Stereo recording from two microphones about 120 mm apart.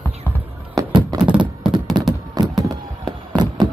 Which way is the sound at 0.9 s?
40° right (ahead or behind).